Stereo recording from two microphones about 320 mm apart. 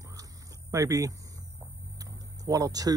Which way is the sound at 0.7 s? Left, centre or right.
Centre.